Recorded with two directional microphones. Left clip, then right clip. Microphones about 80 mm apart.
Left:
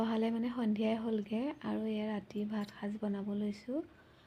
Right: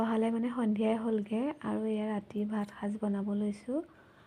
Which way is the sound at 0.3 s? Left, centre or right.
Right.